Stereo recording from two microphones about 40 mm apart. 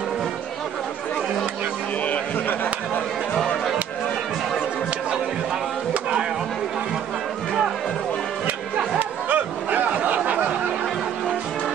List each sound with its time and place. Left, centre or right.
9.3 s chatter: right